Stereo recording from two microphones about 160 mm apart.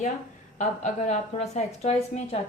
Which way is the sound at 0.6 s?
45° left (ahead or behind).